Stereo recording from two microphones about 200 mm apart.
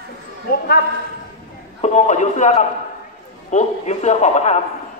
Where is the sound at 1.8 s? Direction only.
35° left (ahead or behind).